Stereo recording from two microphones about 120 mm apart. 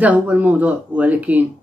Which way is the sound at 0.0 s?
10° right (ahead or behind).